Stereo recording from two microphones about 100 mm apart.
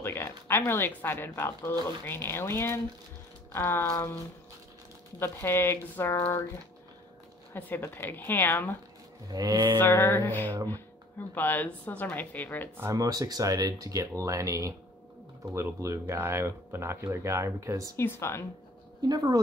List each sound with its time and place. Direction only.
0.0 s speech: 25° left (ahead or behind)
5.2 s speech: 25° left (ahead or behind)
7.5 s speech: 20° left (ahead or behind)
9.3 s speech: 40° right (ahead or behind)
9.8 s speech: 25° left (ahead or behind)
12.7 s speech: 30° right (ahead or behind)
17.9 s speech: 25° left (ahead or behind)
19.0 s speech: 40° right (ahead or behind)